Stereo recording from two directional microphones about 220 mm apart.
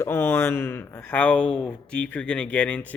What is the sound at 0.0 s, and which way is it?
Speech, 10° left (ahead or behind).